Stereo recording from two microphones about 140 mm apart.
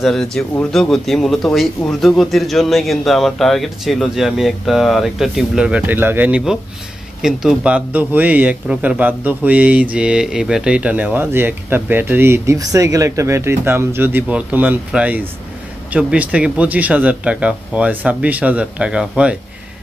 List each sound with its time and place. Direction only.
0.0 s a man's voice: 5° left (ahead or behind)